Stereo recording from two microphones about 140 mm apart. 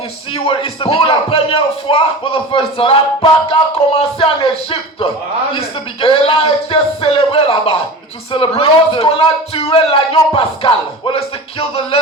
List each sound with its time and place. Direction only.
0.3 s speech: 40° left (ahead or behind)